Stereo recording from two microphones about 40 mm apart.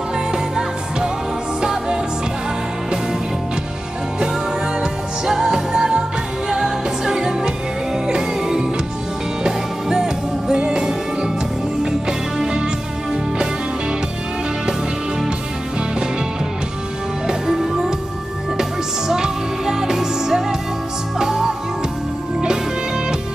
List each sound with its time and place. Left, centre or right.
0.3 s music: centre
4.7 s music: centre
14.7 s music: centre
17.3 s music: centre